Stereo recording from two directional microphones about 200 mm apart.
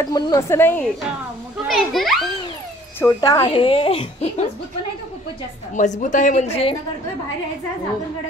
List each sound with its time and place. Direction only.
0.0 s a child's voice: 20° left (ahead or behind); by 2.2 s centre (ahead or behind)
3.0 s speech: 20° left (ahead or behind)
5.8 s speech: 40° left (ahead or behind)